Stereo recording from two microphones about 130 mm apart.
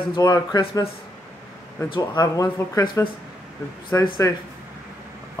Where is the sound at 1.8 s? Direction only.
40° left (ahead or behind).